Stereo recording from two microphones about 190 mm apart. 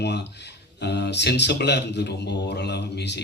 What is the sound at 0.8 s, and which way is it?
A man's voice, 60° left (ahead or behind).